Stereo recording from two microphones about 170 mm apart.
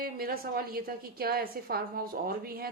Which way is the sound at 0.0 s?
60° right (ahead or behind).